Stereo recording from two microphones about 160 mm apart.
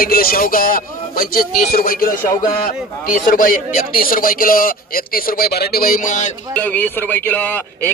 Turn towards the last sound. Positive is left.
turn(degrees=10)  # may be behind; listen again after turning